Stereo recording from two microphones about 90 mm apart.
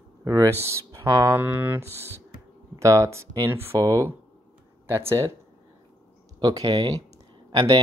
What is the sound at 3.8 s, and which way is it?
Speech, 40° right (ahead or behind).